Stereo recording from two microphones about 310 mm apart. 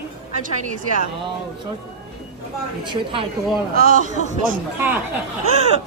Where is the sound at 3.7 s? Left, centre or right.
Right.